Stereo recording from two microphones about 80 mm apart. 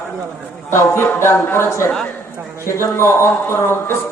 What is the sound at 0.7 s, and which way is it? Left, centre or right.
A man's voice, left.